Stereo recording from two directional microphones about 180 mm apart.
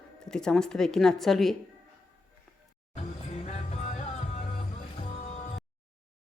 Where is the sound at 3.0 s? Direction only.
35° left (ahead or behind).